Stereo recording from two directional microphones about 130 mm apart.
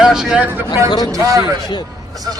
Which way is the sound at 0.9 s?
30° left (ahead or behind).